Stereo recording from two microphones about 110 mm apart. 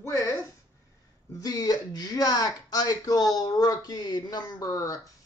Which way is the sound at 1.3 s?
35° left (ahead or behind).